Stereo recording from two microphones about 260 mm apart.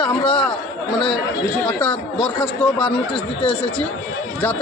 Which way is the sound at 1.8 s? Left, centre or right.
Centre.